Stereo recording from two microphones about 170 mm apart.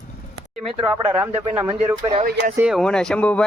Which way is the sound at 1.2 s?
10° right (ahead or behind).